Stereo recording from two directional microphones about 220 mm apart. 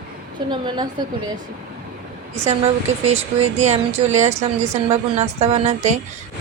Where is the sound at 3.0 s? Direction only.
30° right (ahead or behind).